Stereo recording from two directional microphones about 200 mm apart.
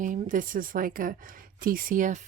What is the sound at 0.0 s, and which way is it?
Speech, 40° right (ahead or behind).